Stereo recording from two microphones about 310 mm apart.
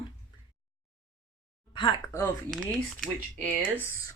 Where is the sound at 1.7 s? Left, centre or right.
Centre.